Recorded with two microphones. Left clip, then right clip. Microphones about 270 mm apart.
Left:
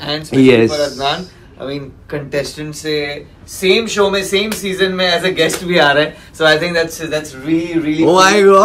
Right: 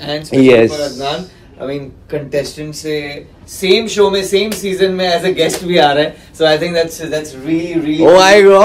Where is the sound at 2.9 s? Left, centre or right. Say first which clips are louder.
Left 2 dB; centre.